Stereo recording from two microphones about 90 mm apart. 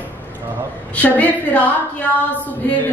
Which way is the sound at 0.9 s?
15° left (ahead or behind).